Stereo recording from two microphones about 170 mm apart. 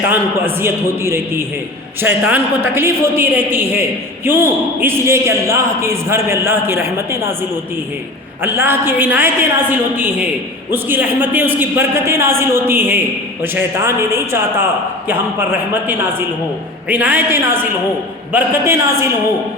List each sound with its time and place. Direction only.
0.1 s a man's voice: 15° right (ahead or behind)
8.4 s a man's voice: 10° right (ahead or behind)
16.9 s a man's voice: 10° right (ahead or behind)